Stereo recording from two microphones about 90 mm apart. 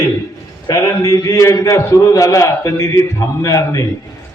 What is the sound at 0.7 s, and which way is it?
A man's voice, 40° left (ahead or behind).